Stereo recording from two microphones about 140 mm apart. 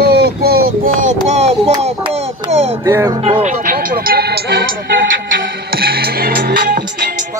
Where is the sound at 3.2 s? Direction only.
50° right (ahead or behind).